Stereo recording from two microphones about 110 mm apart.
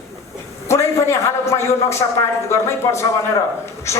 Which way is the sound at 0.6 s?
25° left (ahead or behind).